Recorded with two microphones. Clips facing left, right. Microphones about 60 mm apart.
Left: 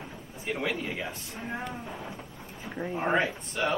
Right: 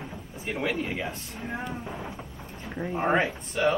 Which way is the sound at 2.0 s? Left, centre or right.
Right.